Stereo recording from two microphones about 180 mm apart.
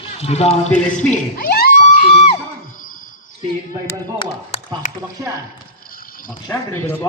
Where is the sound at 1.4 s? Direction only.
60° left (ahead or behind).